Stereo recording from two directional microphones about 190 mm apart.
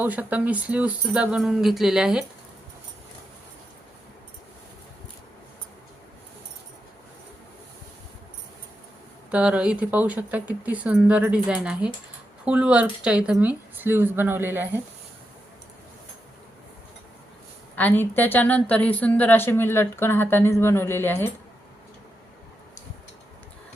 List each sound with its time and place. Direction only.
0.0 s speech: 10° right (ahead or behind)
9.3 s speech: 5° right (ahead or behind)
17.7 s a woman's voice: 10° left (ahead or behind)